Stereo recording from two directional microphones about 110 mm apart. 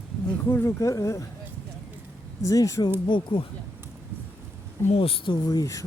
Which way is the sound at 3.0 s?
50° left (ahead or behind).